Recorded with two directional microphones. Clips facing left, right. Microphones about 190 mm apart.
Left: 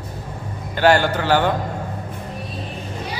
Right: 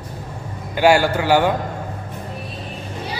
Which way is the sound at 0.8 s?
10° right (ahead or behind).